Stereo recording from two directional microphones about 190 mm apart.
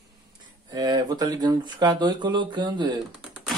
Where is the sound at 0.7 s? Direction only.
20° right (ahead or behind).